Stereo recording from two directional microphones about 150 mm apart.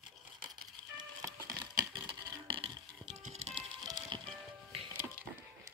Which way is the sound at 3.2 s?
50° right (ahead or behind).